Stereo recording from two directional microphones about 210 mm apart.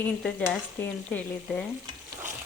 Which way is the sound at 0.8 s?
10° left (ahead or behind).